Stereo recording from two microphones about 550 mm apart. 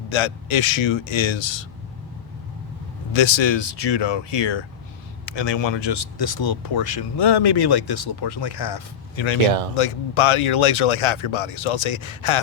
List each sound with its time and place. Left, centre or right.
0.1 s speech: left
3.1 s speech: left
9.7 s speech: left